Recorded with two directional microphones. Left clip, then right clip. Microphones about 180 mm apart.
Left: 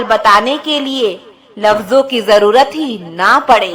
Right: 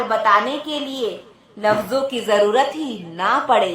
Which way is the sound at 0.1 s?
35° left (ahead or behind).